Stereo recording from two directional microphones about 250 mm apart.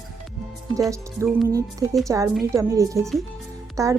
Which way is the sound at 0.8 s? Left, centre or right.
Centre.